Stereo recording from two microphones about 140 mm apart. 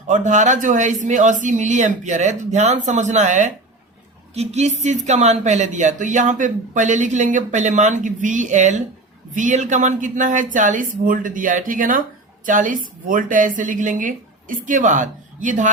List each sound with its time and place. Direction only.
0.1 s a woman's voice: 60° right (ahead or behind)